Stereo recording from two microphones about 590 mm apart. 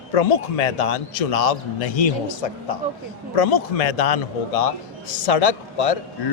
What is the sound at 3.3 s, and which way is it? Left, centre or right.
A man's voice, left.